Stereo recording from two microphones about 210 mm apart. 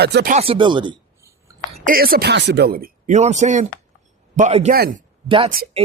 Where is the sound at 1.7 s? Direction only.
40° right (ahead or behind).